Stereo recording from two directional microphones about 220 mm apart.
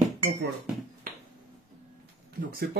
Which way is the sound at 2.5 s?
45° right (ahead or behind).